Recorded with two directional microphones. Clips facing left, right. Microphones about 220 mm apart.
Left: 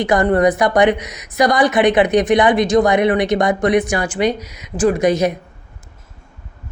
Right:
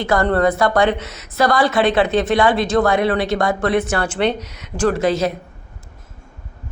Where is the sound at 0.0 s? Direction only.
15° left (ahead or behind).